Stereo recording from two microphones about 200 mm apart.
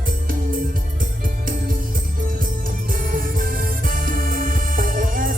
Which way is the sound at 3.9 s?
45° right (ahead or behind).